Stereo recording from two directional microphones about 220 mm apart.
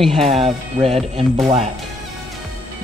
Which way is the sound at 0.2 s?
30° right (ahead or behind).